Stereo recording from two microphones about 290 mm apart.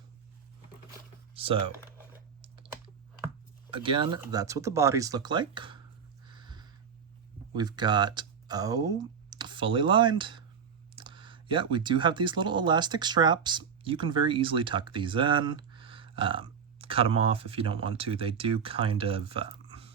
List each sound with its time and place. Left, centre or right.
1.3 s speech: centre
2.4 s computer keyboard: centre
3.7 s speech: centre
6.2 s a sound: centre
7.5 s speech: centre